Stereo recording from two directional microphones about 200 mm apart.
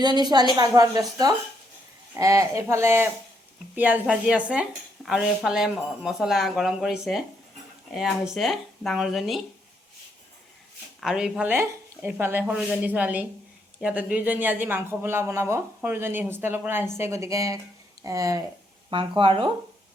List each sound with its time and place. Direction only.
0.0 s a woman's voice: 20° right (ahead or behind); by 9.4 s centre (ahead or behind)
11.0 s a woman's voice: 5° right (ahead or behind); by 19.5 s 25° right (ahead or behind)